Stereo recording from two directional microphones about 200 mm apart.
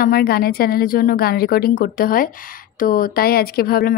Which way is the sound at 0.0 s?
50° left (ahead or behind).